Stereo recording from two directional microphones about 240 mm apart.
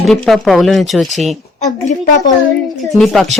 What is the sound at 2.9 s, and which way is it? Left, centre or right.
Speech, centre.